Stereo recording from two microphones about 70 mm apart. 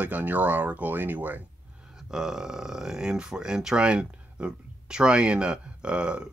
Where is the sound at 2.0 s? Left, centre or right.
Centre.